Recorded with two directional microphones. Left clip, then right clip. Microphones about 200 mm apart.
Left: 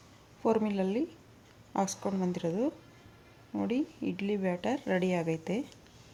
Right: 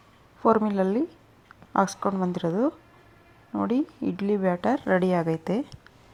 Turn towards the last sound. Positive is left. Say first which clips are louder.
# right 6 dB
turn(degrees=-20)  # may be behind; listen again after turning